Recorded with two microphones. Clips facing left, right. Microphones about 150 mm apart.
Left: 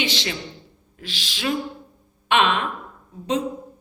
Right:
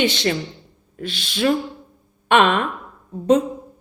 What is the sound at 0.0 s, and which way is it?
A woman's voice, 50° right (ahead or behind).